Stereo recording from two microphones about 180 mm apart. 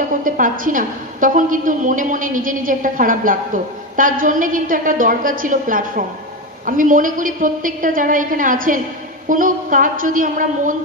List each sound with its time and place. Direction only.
0.2 s a woman's voice: 50° right (ahead or behind)